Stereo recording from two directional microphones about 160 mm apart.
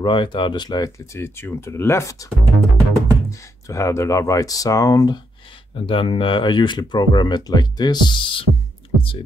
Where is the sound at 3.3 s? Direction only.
20° left (ahead or behind).